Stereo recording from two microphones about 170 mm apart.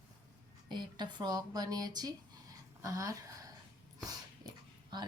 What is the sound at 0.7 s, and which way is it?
Speech, 25° right (ahead or behind).